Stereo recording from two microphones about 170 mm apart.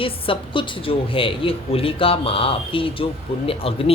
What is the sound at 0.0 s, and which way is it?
A man's voice, 30° left (ahead or behind).